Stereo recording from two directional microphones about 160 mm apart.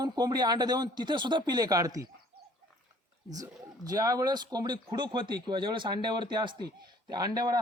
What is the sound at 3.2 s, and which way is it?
A man's voice, 25° right (ahead or behind).